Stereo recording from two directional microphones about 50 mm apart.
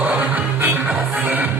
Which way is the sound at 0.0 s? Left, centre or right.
Right.